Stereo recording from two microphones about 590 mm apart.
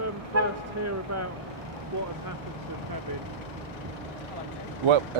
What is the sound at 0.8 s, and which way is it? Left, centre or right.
Speech, right.